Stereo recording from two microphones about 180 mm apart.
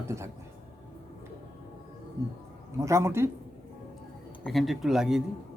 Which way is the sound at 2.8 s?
15° right (ahead or behind).